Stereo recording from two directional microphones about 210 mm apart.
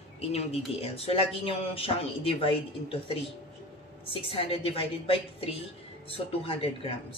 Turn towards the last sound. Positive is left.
turn(degrees=25)  # may be behind; listen again after turning